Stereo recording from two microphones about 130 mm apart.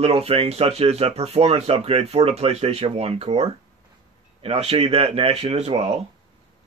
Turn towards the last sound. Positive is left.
turn(degrees=-55)  # may be behind; listen again after turning